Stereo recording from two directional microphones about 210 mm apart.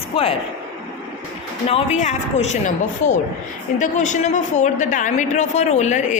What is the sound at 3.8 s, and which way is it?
A woman's voice, 35° left (ahead or behind).